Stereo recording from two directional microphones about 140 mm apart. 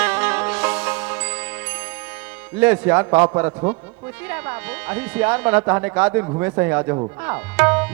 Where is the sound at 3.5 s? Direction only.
30° right (ahead or behind).